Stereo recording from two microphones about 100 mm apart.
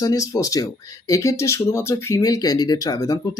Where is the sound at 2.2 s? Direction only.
40° left (ahead or behind).